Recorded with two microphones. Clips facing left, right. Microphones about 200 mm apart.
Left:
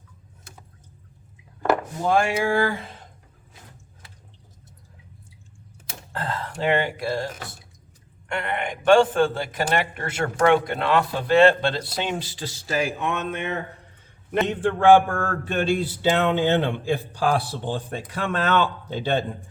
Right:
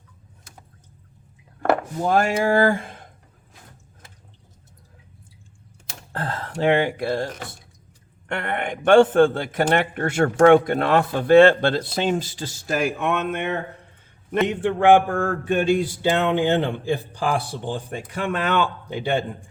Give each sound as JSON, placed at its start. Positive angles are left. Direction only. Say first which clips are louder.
{"t": 2.0, "sound": "a man's voice", "louder": "right 1 dB", "side_deg": -40}
{"t": 6.1, "sound": "a man's voice", "louder": "right 2 dB", "side_deg": -50}
{"t": 14.4, "sound": "speech", "louder": "even", "side_deg": -15}